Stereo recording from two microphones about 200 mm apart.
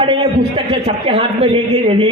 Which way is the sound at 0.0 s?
25° right (ahead or behind).